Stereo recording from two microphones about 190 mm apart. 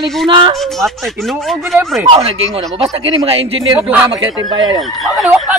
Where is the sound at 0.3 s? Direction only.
25° right (ahead or behind).